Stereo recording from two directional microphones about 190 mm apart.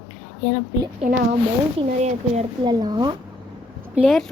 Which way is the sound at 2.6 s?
20° right (ahead or behind).